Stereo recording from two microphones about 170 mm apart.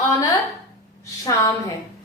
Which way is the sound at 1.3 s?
20° left (ahead or behind).